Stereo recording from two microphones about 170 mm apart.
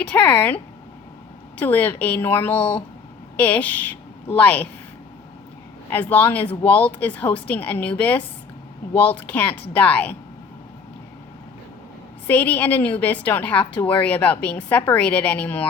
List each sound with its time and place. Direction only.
0.0 s a woman's voice: 10° left (ahead or behind)
2.6 s speech: 30° left (ahead or behind)
3.3 s a woman's voice: 10° left (ahead or behind)
5.9 s a woman's voice: 10° left (ahead or behind)
12.3 s a woman's voice: 10° left (ahead or behind)